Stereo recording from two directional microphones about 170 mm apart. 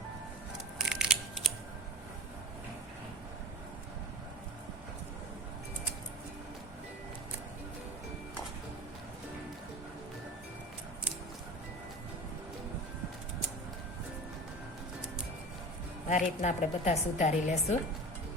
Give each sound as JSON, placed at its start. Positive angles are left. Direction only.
{"t": 0.8, "sound": "scissors", "side_deg": -5}
{"t": 16.0, "sound": "a woman's voice", "side_deg": 45}